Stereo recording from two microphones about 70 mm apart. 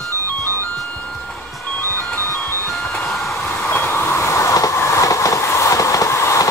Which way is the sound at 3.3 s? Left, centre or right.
Left.